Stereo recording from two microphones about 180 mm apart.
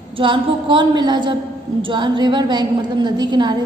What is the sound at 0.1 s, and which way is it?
A woman's voice, 25° right (ahead or behind).